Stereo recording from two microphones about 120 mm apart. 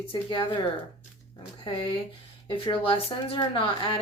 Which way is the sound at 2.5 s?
45° left (ahead or behind).